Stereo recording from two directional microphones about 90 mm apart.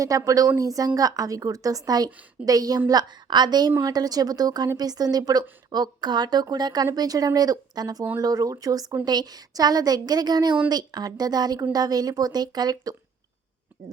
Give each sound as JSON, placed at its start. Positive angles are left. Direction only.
{"t": 0.0, "sound": "speech", "side_deg": -40}